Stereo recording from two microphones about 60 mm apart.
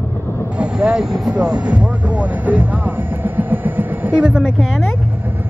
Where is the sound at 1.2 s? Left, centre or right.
Right.